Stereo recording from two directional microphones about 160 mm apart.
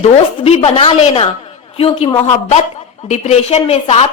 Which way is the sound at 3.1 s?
45° left (ahead or behind).